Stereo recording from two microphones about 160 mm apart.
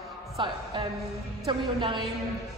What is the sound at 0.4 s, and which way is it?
A woman's voice, 30° right (ahead or behind).